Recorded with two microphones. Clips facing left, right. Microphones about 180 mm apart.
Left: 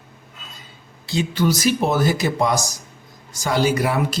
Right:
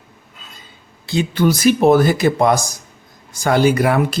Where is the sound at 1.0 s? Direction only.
55° right (ahead or behind).